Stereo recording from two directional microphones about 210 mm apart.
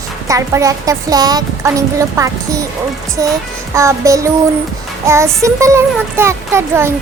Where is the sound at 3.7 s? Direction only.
15° right (ahead or behind).